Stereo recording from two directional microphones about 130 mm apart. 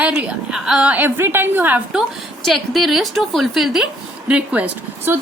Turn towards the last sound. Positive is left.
turn(degrees=-15)  # may be behind; listen again after turning